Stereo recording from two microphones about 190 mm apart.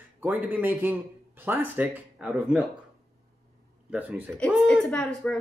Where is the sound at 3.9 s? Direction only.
10° right (ahead or behind).